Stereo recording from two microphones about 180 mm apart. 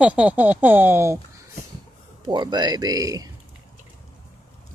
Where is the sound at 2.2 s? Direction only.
25° right (ahead or behind).